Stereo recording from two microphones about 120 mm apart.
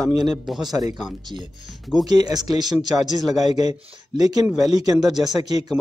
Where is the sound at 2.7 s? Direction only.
Centre (ahead or behind).